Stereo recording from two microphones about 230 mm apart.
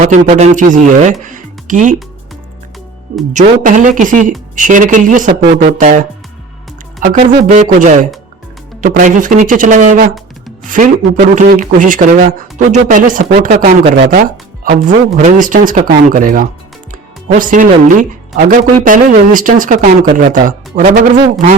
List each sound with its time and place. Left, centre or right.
0.0 s speech: right
3.3 s speech: right